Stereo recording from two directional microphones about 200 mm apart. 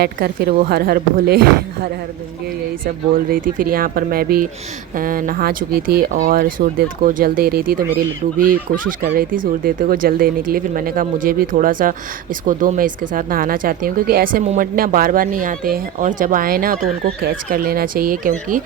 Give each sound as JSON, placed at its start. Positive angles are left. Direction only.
{"t": 0.0, "sound": "speech", "side_deg": -50}